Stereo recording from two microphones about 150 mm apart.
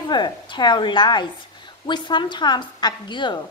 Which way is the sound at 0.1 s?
30° left (ahead or behind).